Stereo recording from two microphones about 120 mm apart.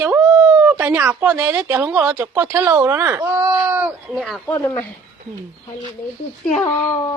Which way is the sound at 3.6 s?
15° right (ahead or behind).